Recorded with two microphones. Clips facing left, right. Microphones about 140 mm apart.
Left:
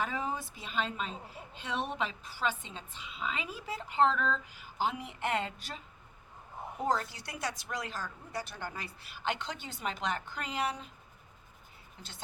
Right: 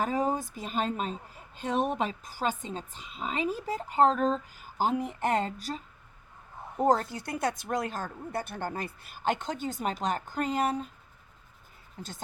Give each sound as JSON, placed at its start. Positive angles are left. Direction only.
{"t": 0.0, "sound": "speech", "side_deg": -40}
{"t": 12.0, "sound": "speech", "side_deg": -45}